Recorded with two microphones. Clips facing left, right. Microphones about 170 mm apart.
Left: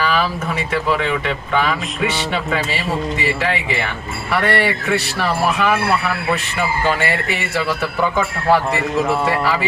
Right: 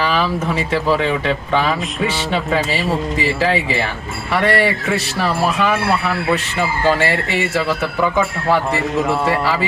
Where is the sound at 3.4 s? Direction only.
35° right (ahead or behind).